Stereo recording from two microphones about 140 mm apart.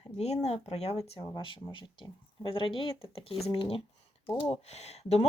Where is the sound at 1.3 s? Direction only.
35° left (ahead or behind).